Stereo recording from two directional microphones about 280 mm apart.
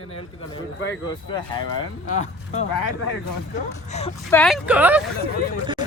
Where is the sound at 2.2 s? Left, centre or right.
Left.